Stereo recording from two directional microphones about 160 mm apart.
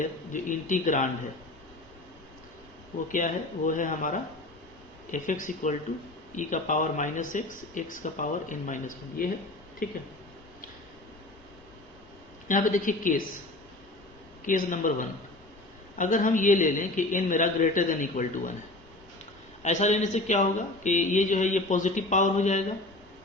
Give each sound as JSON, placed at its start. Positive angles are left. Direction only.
{"t": 0.0, "sound": "speech", "side_deg": 55}
{"t": 3.1, "sound": "speech", "side_deg": 55}
{"t": 12.5, "sound": "a woman's voice", "side_deg": 55}
{"t": 14.4, "sound": "a woman's voice", "side_deg": 55}
{"t": 19.6, "sound": "speech", "side_deg": 45}